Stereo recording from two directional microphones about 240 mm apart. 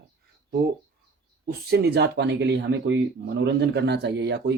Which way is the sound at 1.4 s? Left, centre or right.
Right.